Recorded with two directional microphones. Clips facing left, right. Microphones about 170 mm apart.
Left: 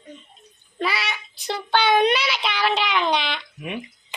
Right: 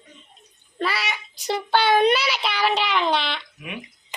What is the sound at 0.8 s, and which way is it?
Speech, centre (ahead or behind).